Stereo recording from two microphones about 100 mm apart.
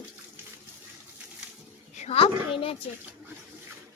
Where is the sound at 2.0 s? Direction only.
75° left (ahead or behind).